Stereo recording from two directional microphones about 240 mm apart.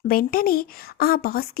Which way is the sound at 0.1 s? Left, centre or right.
Left.